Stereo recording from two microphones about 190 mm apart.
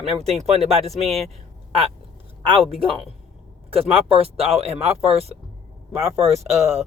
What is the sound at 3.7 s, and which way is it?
Speech, 30° right (ahead or behind).